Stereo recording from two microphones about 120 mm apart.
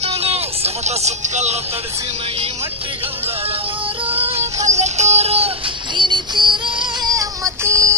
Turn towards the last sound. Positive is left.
turn(degrees=-25)  # may be behind; listen again after turning